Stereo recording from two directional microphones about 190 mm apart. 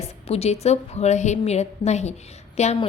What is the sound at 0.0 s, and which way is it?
A woman's voice, 35° left (ahead or behind).